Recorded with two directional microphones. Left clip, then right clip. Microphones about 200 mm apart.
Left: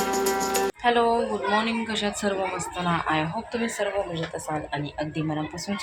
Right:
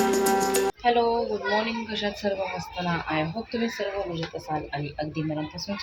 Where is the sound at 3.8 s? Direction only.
Centre (ahead or behind).